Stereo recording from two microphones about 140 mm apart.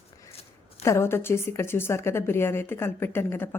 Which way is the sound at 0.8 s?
20° left (ahead or behind).